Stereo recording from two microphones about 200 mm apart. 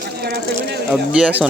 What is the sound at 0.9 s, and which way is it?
Speech, 5° right (ahead or behind).